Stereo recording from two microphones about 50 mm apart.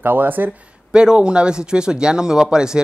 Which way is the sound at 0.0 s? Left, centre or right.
Right.